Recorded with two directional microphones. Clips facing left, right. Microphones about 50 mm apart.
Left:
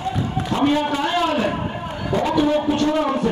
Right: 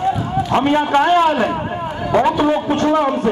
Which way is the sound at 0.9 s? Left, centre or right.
Right.